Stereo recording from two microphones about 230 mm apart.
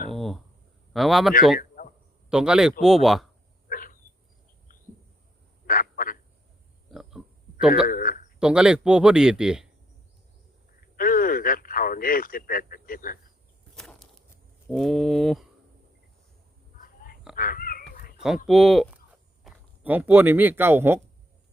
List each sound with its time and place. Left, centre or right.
0.1 s a sound: centre
0.9 s speech: centre
1.5 s a sound: left
2.3 s speech: centre
3.7 s a sound: left
5.6 s duck: left
6.9 s pig: centre
7.9 s speech: left
8.4 s speech: centre
10.9 s speech: left
14.7 s speech: centre
16.7 s a sound: left
17.3 s dog: left
18.4 s speech: centre